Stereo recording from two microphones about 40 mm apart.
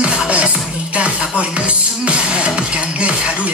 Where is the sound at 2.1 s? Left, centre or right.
Right.